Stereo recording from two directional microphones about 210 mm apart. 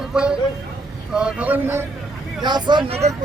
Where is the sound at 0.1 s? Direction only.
5° right (ahead or behind).